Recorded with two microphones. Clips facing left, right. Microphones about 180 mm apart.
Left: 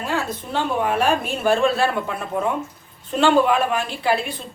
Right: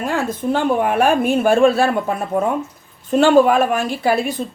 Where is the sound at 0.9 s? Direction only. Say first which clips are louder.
Right 5 dB; 55° right (ahead or behind).